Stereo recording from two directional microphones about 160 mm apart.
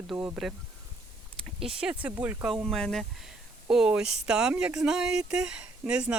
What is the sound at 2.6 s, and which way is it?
Speech, 5° left (ahead or behind).